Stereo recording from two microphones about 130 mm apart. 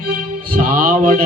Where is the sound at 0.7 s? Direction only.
90° right.